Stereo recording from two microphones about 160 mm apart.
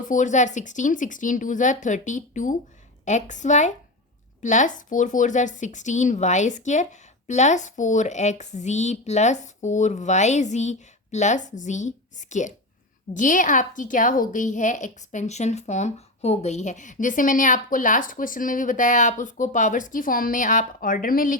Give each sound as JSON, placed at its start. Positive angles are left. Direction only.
{"t": 0.0, "sound": "speech", "side_deg": 55}